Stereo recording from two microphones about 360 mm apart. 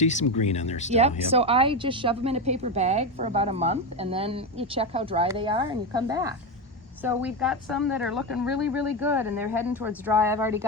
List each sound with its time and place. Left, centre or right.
0.0 s speech: centre
0.9 s a woman's voice: centre